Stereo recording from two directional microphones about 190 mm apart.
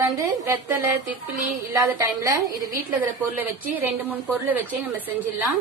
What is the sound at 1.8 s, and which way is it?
A woman's voice, 15° right (ahead or behind).